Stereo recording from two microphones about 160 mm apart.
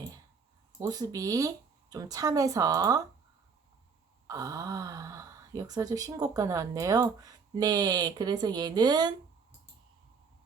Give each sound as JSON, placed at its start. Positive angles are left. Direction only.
{"t": 0.8, "sound": "speech", "side_deg": -20}
{"t": 4.3, "sound": "speech", "side_deg": -20}